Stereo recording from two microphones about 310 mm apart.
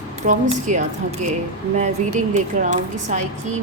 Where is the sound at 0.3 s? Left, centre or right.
Right.